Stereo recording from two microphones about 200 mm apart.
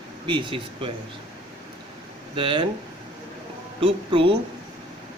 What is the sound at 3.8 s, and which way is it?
Speech, 25° right (ahead or behind).